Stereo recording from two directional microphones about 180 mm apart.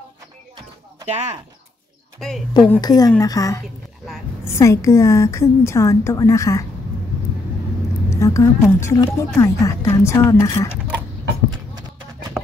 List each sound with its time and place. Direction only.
1.0 s speech: 40° right (ahead or behind)
2.1 s a woman's voice: centre (ahead or behind)
2.8 s a woman's voice: 20° left (ahead or behind)
8.1 s speech: 15° left (ahead or behind)